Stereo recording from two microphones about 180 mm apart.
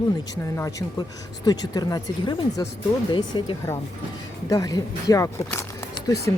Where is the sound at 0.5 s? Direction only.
15° left (ahead or behind).